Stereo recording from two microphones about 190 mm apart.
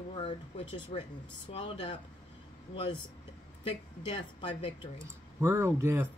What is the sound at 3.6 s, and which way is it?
Speech, 25° left (ahead or behind).